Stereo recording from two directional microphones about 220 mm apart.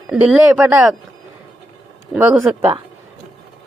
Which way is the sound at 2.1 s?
5° right (ahead or behind).